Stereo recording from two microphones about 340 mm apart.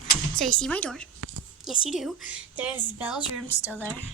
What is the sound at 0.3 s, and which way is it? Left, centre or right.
Speech, centre.